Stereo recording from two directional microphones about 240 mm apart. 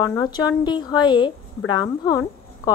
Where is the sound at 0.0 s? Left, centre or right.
Centre.